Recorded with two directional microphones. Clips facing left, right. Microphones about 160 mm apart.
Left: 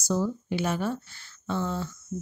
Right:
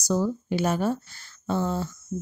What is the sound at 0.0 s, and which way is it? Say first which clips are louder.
Speech: right 2 dB; 40° right (ahead or behind).